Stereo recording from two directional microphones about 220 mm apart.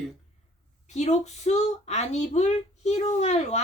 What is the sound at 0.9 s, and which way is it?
A woman's voice, 30° left (ahead or behind).